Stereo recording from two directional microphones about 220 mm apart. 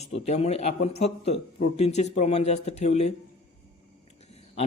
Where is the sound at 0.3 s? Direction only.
30° left (ahead or behind).